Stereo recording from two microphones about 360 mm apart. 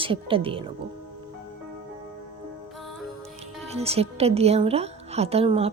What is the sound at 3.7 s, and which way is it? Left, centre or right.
Speech, centre.